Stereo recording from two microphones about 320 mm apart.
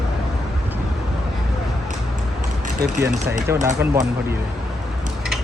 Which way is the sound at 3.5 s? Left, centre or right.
Centre.